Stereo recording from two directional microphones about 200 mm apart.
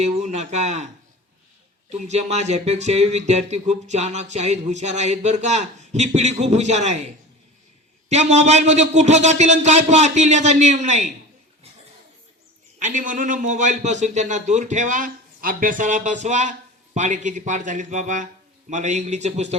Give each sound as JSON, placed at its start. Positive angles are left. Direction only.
{"t": 0.0, "sound": "a man's voice", "side_deg": -30}
{"t": 1.9, "sound": "a man's voice", "side_deg": -35}
{"t": 8.1, "sound": "a man's voice", "side_deg": -35}
{"t": 12.8, "sound": "a man's voice", "side_deg": -40}